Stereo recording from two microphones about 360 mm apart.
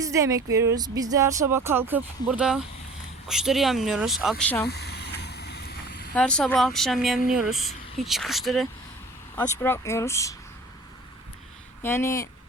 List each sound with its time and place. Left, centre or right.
0.0 s speech: centre
4.6 s vehicle: left
6.1 s speech: centre
11.8 s speech: centre